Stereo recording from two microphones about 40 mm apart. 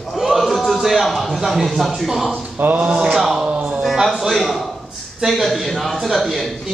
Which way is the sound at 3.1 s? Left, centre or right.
Centre.